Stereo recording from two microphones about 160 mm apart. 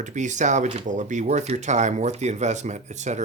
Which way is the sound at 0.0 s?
50° right (ahead or behind).